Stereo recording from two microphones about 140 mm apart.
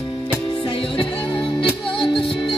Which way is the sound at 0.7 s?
40° left (ahead or behind).